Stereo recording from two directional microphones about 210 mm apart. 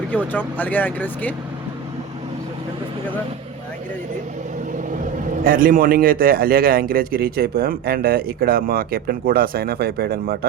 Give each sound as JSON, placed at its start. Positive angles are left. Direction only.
{"t": 0.3, "sound": "speech", "side_deg": 10}
{"t": 5.4, "sound": "a man's voice", "side_deg": -40}